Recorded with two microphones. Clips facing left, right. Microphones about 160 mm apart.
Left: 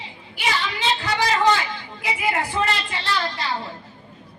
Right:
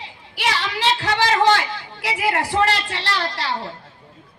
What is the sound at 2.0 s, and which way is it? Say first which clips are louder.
A woman's voice: right 2 dB; 80° right.